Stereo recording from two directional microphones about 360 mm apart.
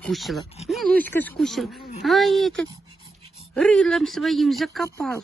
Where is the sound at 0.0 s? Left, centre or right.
Centre.